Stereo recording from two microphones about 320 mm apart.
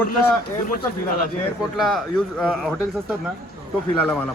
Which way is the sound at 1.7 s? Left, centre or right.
Centre.